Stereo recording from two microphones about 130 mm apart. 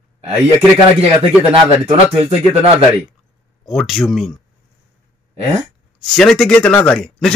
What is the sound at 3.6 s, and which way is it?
Speech, centre (ahead or behind).